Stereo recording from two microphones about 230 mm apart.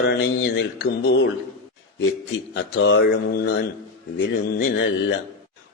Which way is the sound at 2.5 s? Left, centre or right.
Left.